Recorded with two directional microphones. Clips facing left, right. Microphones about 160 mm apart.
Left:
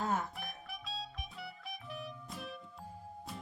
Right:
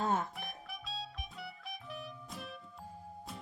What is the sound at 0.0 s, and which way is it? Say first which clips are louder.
Music: right 2 dB; 25° right (ahead or behind).